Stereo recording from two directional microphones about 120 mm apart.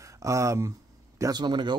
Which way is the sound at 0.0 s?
25° right (ahead or behind).